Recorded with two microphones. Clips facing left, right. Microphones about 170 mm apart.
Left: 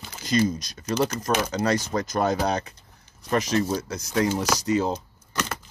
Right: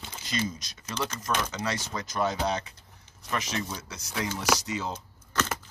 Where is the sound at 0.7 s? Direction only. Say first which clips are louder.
Left 9 dB; 40° left (ahead or behind).